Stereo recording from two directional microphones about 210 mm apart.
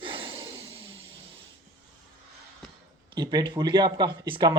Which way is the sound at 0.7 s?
25° right (ahead or behind).